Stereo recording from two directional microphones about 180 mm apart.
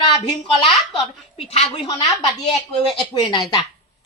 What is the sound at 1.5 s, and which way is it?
Speech, 35° left (ahead or behind).